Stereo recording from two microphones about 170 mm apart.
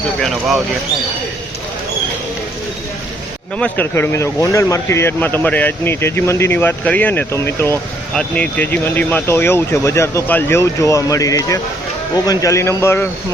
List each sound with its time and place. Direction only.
0.2 s speech: centre (ahead or behind)
3.6 s speech: 10° left (ahead or behind)